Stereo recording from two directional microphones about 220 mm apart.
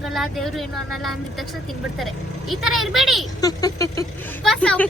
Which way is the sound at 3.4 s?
15° left (ahead or behind).